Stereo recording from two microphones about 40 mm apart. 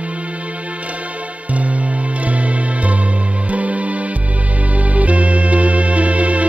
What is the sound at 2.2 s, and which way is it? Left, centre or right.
Music, right.